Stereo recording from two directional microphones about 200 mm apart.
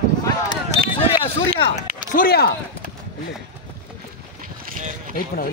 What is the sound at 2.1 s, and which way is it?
Speech, 50° left (ahead or behind).